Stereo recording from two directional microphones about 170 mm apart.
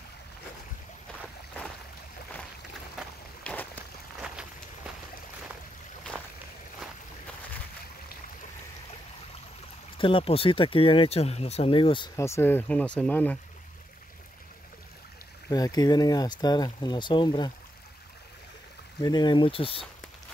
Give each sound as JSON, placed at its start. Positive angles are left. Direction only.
{"t": 3.0, "sound": "a sound", "side_deg": 5}
{"t": 9.9, "sound": "speech", "side_deg": 30}
{"t": 12.2, "sound": "speech", "side_deg": 15}
{"t": 15.5, "sound": "speech", "side_deg": 25}
{"t": 18.9, "sound": "speech", "side_deg": 25}